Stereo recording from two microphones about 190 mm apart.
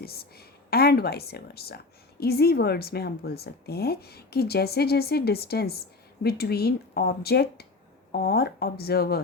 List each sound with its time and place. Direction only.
0.0 s speech: 55° left (ahead or behind)